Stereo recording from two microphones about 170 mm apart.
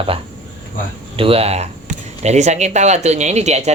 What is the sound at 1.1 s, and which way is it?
Speech, 35° right (ahead or behind).